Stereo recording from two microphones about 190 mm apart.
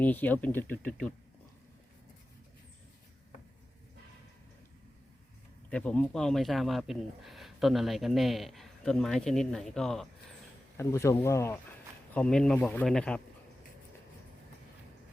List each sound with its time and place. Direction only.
0.0 s speech: 10° left (ahead or behind)
5.7 s speech: 5° left (ahead or behind)
10.8 s speech: 15° left (ahead or behind)